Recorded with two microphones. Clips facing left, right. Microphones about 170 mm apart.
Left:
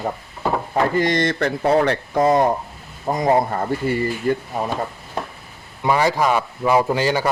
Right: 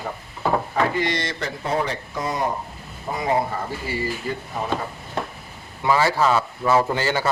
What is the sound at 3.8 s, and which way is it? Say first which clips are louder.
Speech: left 7 dB; 55° left (ahead or behind).